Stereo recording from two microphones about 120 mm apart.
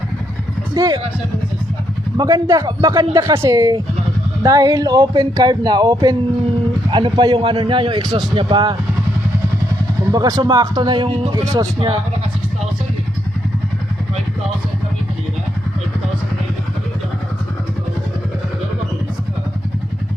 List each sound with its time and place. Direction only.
0.8 s speech: 30° right (ahead or behind)
2.1 s speech: 30° right (ahead or behind)
3.2 s a man's voice: 25° right (ahead or behind); by 8.7 s 40° right (ahead or behind)
10.1 s speech: 30° right (ahead or behind)